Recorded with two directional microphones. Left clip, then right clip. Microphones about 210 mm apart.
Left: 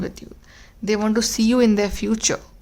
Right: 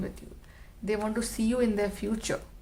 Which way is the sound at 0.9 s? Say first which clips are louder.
Left 10 dB; 45° left (ahead or behind).